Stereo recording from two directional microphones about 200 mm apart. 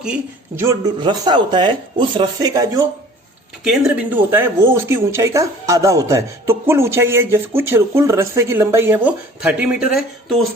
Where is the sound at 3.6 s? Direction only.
5° right (ahead or behind).